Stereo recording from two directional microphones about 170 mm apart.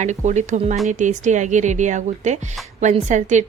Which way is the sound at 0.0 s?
45° right (ahead or behind).